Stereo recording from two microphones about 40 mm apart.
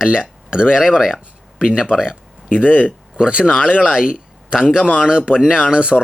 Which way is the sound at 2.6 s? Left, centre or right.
Left.